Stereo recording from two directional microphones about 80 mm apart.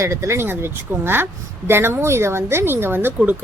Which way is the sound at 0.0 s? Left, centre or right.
Right.